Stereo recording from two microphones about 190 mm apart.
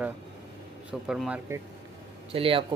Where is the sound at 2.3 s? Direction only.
30° right (ahead or behind).